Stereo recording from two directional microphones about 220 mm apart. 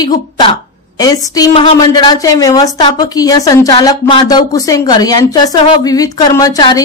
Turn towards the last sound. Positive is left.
turn(degrees=15)  # may be behind; listen again after turning